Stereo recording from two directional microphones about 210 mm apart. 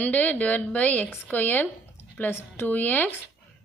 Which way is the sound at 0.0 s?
5° left (ahead or behind).